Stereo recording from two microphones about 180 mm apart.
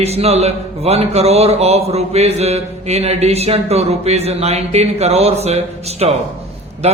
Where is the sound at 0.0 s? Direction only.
35° right (ahead or behind).